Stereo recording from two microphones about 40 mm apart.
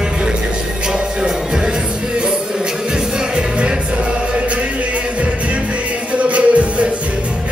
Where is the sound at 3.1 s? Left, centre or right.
Right.